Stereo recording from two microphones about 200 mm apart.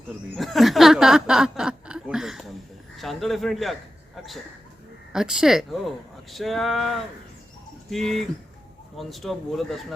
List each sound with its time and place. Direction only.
0.3 s a man's voice: centre (ahead or behind)